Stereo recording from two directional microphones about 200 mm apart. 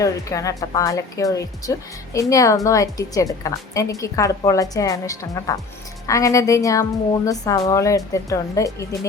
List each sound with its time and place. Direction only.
0.0 s a woman's voice: 15° left (ahead or behind)